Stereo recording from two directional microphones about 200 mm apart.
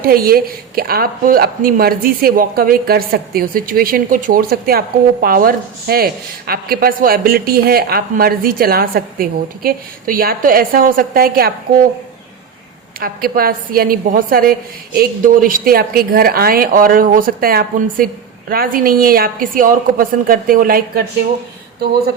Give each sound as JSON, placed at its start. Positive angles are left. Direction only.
{"t": 0.0, "sound": "a woman's voice", "side_deg": -50}
{"t": 13.0, "sound": "a woman's voice", "side_deg": -50}